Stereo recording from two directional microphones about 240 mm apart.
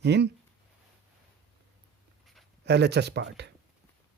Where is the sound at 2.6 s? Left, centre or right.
Right.